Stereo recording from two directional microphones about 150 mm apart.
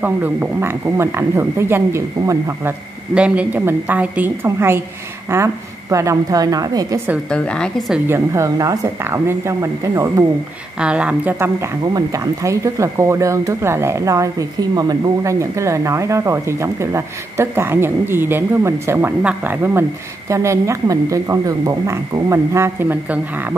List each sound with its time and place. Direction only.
0.0 s speech: 10° right (ahead or behind)
3.2 s speech: 10° right (ahead or behind); by 7.0 s 25° right (ahead or behind)
7.2 s a woman's voice: 5° left (ahead or behind)
8.1 s speech: 20° right (ahead or behind)
10.8 s speech: 5° right (ahead or behind)